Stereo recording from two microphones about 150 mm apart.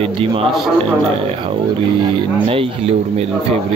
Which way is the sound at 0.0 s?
40° right (ahead or behind).